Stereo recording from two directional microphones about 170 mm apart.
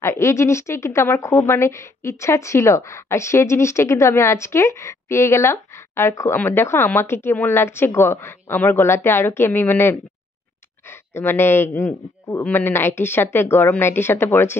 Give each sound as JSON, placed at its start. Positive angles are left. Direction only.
{"t": 0.0, "sound": "a woman's voice", "side_deg": 15}